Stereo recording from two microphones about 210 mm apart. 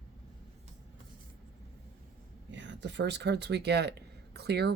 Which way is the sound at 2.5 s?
60° right (ahead or behind).